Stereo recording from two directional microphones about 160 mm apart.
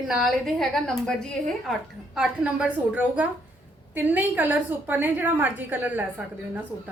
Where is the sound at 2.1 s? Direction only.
5° right (ahead or behind).